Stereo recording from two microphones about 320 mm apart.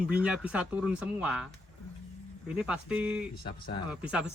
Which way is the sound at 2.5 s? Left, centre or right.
Centre.